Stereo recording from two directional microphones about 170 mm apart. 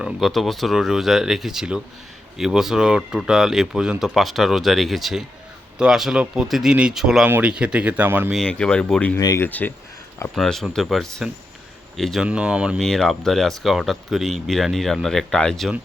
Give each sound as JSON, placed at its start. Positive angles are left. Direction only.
{"t": 0.0, "sound": "speech", "side_deg": 0}
{"t": 8.3, "sound": "speech", "side_deg": 5}
{"t": 9.2, "sound": "speech", "side_deg": 20}